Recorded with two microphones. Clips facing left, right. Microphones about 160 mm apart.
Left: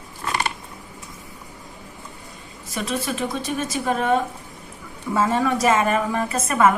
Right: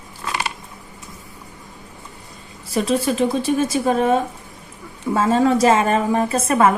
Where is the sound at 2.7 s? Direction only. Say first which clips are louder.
Right 7 dB; 30° right (ahead or behind).